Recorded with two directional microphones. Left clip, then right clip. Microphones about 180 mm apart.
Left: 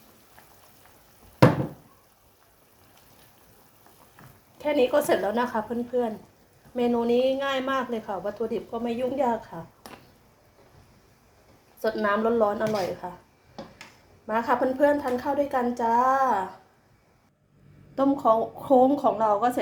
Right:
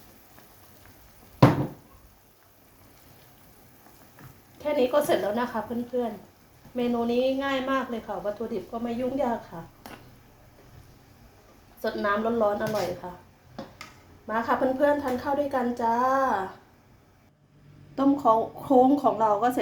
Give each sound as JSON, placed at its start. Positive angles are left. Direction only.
{"t": 4.5, "sound": "a woman's voice", "side_deg": 35}
{"t": 11.8, "sound": "a woman's voice", "side_deg": 30}
{"t": 14.3, "sound": "a woman's voice", "side_deg": 30}
{"t": 17.9, "sound": "a woman's voice", "side_deg": 20}